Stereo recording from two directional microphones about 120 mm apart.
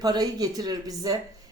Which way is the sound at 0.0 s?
35° right (ahead or behind).